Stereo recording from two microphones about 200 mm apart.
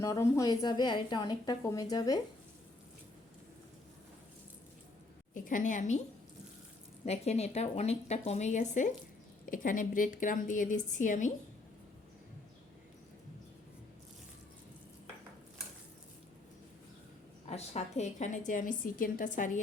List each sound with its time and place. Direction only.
0.0 s a woman's voice: 15° left (ahead or behind)
5.3 s a woman's voice: 40° left (ahead or behind)
7.0 s a woman's voice: 30° left (ahead or behind)
17.4 s a woman's voice: 30° left (ahead or behind)